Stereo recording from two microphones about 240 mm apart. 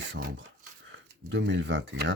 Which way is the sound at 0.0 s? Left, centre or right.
Right.